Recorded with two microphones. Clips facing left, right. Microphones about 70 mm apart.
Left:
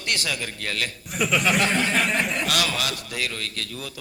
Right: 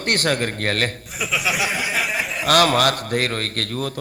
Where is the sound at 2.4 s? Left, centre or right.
Right.